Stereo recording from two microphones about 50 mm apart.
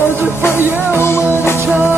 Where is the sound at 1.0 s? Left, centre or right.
Left.